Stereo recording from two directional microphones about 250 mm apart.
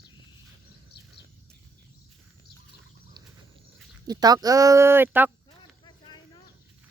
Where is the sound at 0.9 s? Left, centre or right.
Left.